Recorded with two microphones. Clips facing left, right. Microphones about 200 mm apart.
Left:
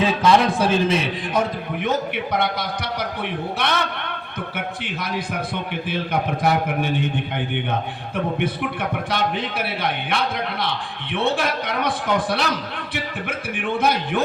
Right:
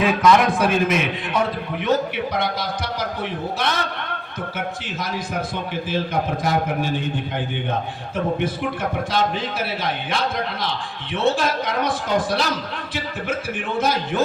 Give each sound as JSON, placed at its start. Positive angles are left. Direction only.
{"t": 0.0, "sound": "a man's voice", "side_deg": 30}
{"t": 1.8, "sound": "a man's voice", "side_deg": 55}